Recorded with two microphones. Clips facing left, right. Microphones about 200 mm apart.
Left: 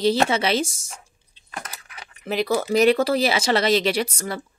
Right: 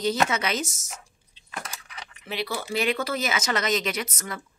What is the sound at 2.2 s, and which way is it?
A woman's voice, 45° left (ahead or behind).